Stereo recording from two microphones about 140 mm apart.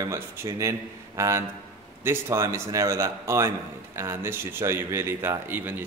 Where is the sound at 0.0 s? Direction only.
20° right (ahead or behind).